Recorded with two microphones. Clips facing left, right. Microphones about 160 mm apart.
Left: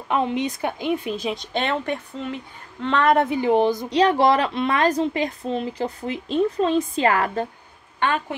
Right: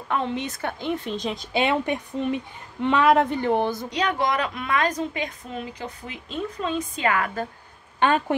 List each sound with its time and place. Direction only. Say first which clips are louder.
0.1 s a woman's voice: left 4 dB; 15° left (ahead or behind); by 3.3 s 5° right (ahead or behind)
3.3 s a woman's voice: left 4 dB; 10° left (ahead or behind)
3.9 s a woman's voice: left 9 dB; 30° left (ahead or behind)